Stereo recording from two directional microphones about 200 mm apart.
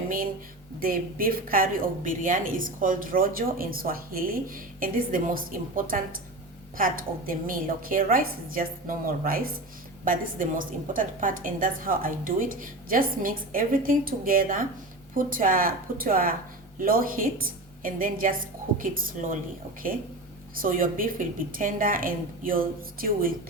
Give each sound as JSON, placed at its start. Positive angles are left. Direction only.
{"t": 0.8, "sound": "a woman's voice", "side_deg": -45}
{"t": 20.6, "sound": "a woman's voice", "side_deg": -45}